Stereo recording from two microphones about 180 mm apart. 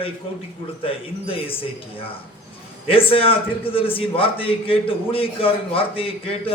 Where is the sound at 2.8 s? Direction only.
30° left (ahead or behind).